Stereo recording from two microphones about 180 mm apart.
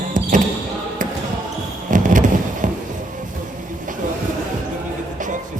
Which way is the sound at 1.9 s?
45° right (ahead or behind).